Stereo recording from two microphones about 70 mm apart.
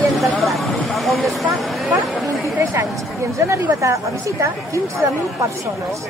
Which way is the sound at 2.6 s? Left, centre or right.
Right.